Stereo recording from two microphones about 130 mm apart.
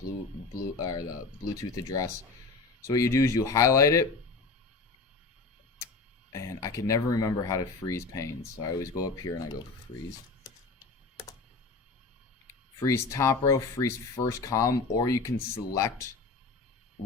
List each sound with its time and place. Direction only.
0.8 s speech: 25° left (ahead or behind)
6.3 s speech: 25° left (ahead or behind)
12.8 s speech: 25° left (ahead or behind)